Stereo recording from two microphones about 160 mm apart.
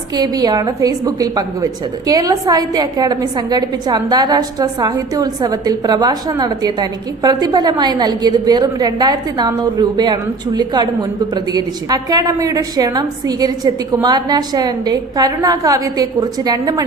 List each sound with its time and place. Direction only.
0.1 s a woman's voice: 25° right (ahead or behind)